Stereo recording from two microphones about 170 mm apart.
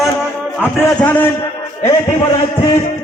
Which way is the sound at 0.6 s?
10° left (ahead or behind).